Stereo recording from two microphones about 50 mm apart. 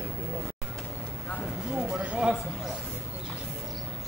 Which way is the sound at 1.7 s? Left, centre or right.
Centre.